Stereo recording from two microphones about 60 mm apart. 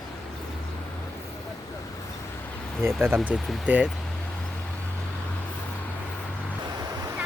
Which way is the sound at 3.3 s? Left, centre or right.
Right.